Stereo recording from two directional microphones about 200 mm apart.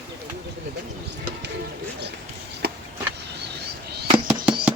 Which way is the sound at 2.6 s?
55° right (ahead or behind).